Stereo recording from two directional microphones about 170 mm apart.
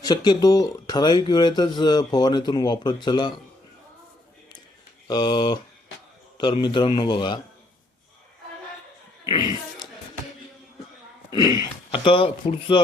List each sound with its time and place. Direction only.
0.0 s speech: 25° left (ahead or behind)
5.0 s speech: 25° left (ahead or behind)
9.2 s a sound: 25° left (ahead or behind)
11.3 s speech: 25° left (ahead or behind)